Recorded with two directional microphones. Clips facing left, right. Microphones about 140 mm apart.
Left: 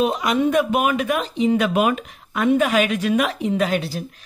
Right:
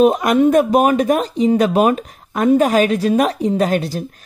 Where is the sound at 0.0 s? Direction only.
50° right (ahead or behind).